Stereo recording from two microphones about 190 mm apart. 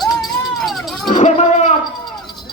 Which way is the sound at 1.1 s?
40° left (ahead or behind).